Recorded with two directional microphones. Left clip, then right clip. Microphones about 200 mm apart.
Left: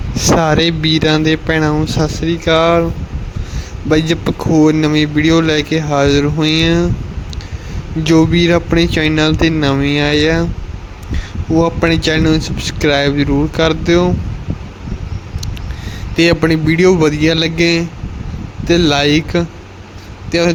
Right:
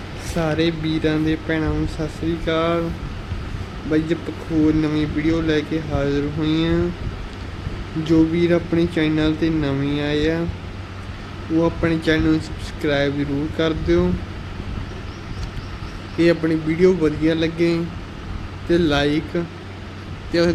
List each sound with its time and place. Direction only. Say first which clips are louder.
0.4 s speech: left 8 dB; 45° left (ahead or behind)
4.6 s speech: left 6 dB; 45° left (ahead or behind)
8.0 s speech: left 6 dB; 45° left (ahead or behind)
11.5 s speech: left 7 dB; 40° left (ahead or behind)
16.1 s speech: left 6 dB; 45° left (ahead or behind)